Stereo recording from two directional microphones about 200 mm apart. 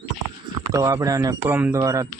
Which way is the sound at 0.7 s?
15° right (ahead or behind).